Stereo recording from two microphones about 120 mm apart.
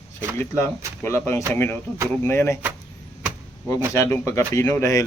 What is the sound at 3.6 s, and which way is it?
Speech, 25° left (ahead or behind).